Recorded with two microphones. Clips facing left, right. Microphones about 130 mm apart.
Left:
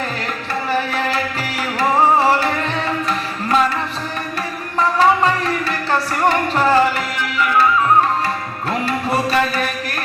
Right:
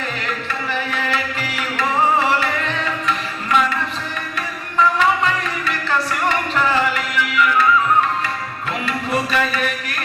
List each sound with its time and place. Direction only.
0.7 s music: 35° left (ahead or behind)
3.5 s music: 35° left (ahead or behind)
4.8 s music: 35° left (ahead or behind)
8.9 s music: 35° left (ahead or behind)